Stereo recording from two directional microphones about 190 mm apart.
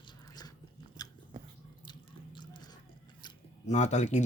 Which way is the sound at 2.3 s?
25° left (ahead or behind).